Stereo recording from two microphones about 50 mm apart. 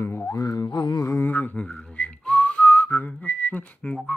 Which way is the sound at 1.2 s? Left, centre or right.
Left.